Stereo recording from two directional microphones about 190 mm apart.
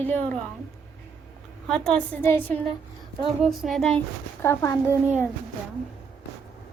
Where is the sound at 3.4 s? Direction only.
Centre (ahead or behind); by 5.2 s 15° left (ahead or behind).